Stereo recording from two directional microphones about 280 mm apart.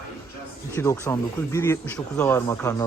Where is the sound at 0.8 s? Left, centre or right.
Centre.